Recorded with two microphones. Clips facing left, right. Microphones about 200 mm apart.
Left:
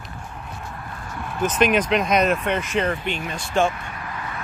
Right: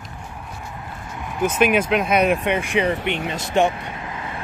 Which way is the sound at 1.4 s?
10° right (ahead or behind).